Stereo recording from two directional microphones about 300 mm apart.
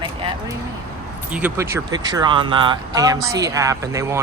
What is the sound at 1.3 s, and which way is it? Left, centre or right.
Speech, centre.